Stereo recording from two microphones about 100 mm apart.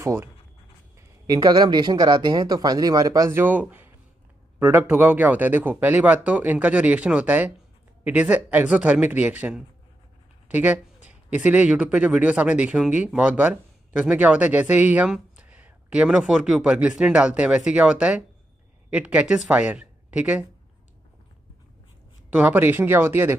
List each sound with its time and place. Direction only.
0.0 s speech: 25° right (ahead or behind)
0.9 s speech: 35° right (ahead or behind)
3.3 s a man's voice: 20° right (ahead or behind)
22.3 s speech: 15° right (ahead or behind)